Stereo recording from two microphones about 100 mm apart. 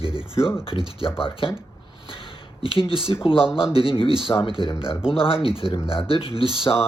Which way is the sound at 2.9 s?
60° left (ahead or behind).